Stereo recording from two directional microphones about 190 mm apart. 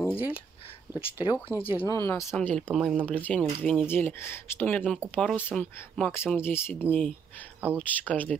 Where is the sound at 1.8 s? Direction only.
15° left (ahead or behind).